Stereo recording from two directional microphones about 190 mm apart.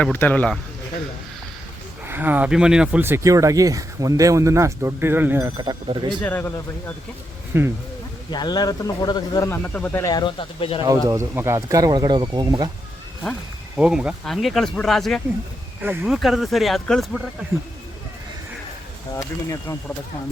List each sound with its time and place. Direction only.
0.0 s speech: 10° left (ahead or behind)
2.0 s speech: 10° right (ahead or behind)
5.5 s speech: 20° right (ahead or behind)
6.2 s speech: 10° left (ahead or behind)
7.5 s speech: 10° right (ahead or behind)
8.3 s speech: 20° left (ahead or behind)
10.8 s speech: 20° right (ahead or behind)
13.7 s speech: 5° right (ahead or behind)
15.8 s speech: 10° right (ahead or behind)
19.1 s speech: 15° left (ahead or behind)